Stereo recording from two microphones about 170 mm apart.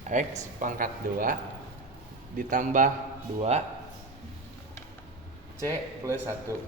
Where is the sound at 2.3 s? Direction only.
50° right (ahead or behind).